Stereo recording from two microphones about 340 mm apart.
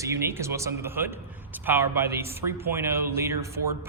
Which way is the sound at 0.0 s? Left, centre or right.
Centre.